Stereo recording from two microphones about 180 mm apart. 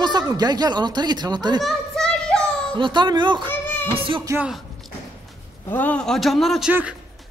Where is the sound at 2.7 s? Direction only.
25° right (ahead or behind).